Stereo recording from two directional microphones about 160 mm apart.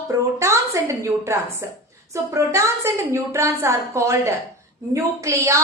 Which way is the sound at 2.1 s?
20° right (ahead or behind).